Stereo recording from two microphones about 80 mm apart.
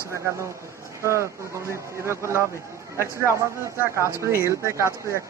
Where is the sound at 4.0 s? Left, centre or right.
Left.